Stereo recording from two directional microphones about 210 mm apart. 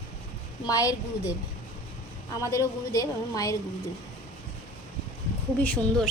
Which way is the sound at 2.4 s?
15° left (ahead or behind).